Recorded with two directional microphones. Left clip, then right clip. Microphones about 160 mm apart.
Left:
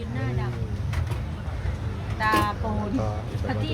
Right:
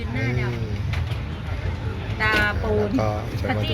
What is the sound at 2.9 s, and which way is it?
Speech, 10° right (ahead or behind).